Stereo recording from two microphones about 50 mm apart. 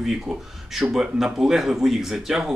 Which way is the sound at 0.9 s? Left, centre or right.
Centre.